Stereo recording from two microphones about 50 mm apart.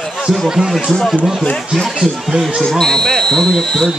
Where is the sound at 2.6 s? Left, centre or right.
Centre.